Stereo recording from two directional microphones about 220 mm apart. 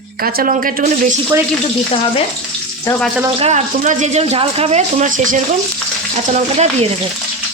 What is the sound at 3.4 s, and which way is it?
Speech, 30° right (ahead or behind).